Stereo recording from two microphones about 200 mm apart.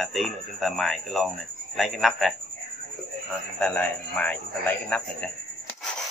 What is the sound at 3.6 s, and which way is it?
Speech, 5° left (ahead or behind).